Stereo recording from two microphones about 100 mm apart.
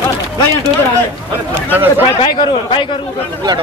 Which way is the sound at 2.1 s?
55° left (ahead or behind).